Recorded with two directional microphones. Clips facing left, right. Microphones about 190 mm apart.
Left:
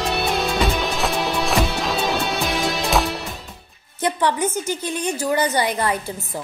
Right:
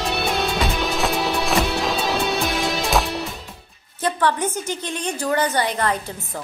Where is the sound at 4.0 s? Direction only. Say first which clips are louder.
Left 1 dB; 15° left (ahead or behind).